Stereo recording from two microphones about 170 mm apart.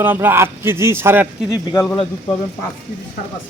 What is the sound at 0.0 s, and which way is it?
A man's voice, 10° right (ahead or behind).